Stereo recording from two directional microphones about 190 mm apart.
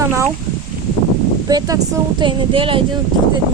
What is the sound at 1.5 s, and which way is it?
Speech, 20° right (ahead or behind).